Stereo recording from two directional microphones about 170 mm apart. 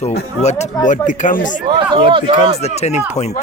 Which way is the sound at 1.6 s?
30° right (ahead or behind).